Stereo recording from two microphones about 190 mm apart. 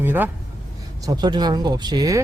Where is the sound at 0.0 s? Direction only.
10° right (ahead or behind).